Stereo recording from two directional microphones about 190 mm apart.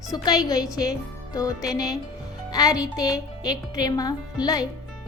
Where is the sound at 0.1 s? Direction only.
20° left (ahead or behind).